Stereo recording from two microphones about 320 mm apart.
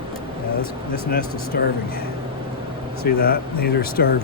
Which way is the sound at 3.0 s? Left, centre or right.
Left.